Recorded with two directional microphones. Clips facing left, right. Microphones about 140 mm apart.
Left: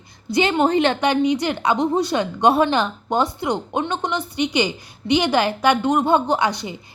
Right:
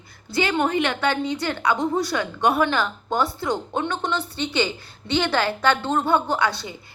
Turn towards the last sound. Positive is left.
turn(degrees=15)  # may be behind; listen again after turning